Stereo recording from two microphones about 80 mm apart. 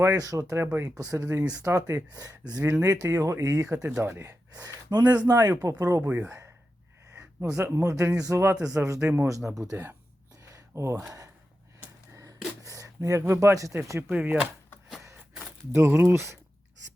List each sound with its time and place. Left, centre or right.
0.0 s speech: right
0.5 s speech: right
0.9 s speech: right
3.8 s speech: right
4.2 s speech: right
6.1 s speech: centre
7.1 s speech: right
8.5 s speech: centre
8.8 s speech: right
10.5 s a sound: right
12.6 s speech: right
14.1 s speech: right
15.7 s speech: right